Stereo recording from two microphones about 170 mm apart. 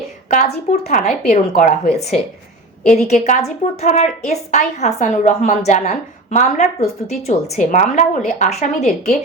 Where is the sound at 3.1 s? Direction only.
45° left (ahead or behind).